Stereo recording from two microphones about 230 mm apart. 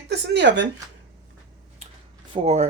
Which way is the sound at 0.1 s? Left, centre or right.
Right.